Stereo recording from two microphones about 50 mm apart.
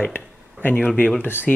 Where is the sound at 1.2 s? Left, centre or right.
Left.